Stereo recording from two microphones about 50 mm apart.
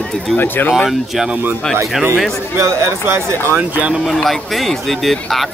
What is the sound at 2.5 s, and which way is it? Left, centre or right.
Speech, right.